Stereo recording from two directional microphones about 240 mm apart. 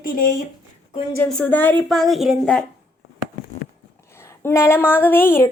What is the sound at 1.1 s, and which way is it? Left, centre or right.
A woman's voice, centre.